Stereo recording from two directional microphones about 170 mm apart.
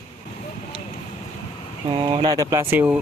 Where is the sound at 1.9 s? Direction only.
25° right (ahead or behind); by 3.0 s 10° right (ahead or behind).